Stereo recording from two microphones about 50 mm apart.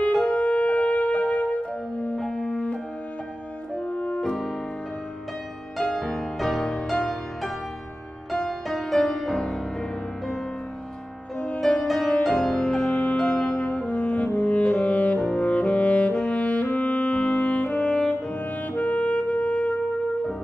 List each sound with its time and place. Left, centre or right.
0.2 s music: left
3.8 s music: left
4.2 s music: centre
5.8 s music: centre
11.3 s music: left
12.2 s music: centre
12.5 s brass instrument: centre
15.4 s music: left